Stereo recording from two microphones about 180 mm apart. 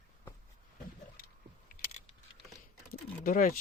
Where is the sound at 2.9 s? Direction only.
50° left (ahead or behind).